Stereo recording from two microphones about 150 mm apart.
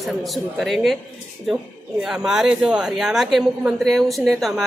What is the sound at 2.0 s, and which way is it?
A woman's voice, 5° right (ahead or behind).